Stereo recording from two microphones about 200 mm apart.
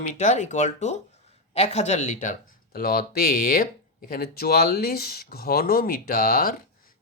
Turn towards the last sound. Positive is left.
turn(degrees=45)  # may be behind; listen again after turning